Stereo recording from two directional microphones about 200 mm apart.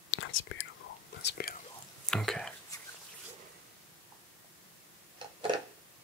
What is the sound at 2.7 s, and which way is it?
Pig, 20° left (ahead or behind).